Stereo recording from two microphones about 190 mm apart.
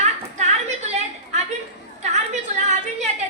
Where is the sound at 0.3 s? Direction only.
35° right (ahead or behind).